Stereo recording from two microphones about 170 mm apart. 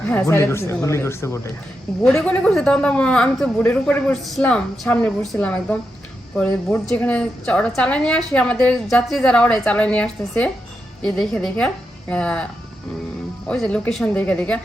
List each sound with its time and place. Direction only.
0.1 s a woman's voice: 15° left (ahead or behind)
13.5 s a woman's voice: 5° left (ahead or behind)